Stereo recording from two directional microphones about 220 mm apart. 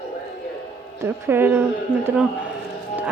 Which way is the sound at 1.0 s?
10° right (ahead or behind).